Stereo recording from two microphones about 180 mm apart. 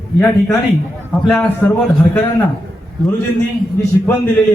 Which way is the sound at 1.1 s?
5° left (ahead or behind).